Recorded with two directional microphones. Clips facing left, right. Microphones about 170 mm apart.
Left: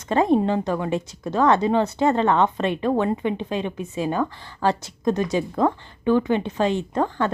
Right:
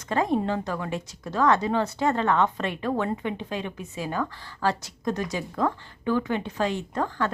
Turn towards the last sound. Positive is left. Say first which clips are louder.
# left 5 dB
turn(degrees=25)  # may be behind; listen again after turning